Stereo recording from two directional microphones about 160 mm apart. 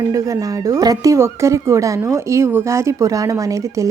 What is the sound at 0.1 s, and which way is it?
A woman's voice, 20° right (ahead or behind).